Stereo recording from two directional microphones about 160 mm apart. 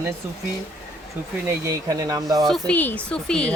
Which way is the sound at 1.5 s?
20° right (ahead or behind).